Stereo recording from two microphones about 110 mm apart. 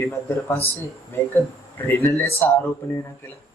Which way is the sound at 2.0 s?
25° left (ahead or behind).